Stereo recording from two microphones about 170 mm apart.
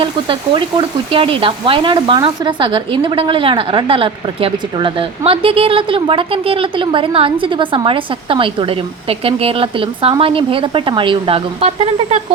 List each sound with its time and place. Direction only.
0.0 s frying: 30° right (ahead or behind)
1.1 s speech: 30° right (ahead or behind)